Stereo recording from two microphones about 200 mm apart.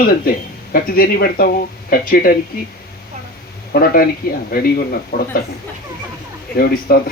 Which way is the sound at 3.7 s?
45° left (ahead or behind).